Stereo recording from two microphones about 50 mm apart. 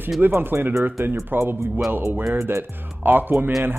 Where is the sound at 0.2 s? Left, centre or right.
Right.